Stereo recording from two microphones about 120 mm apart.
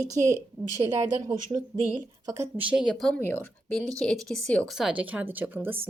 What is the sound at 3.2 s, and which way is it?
Speech, 15° left (ahead or behind).